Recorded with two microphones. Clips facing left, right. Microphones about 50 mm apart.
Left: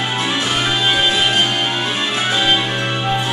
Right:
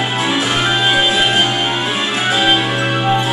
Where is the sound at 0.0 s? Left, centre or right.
Centre.